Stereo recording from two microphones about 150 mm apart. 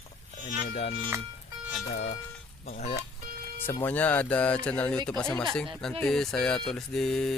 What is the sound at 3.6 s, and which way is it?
Speech, 10° left (ahead or behind).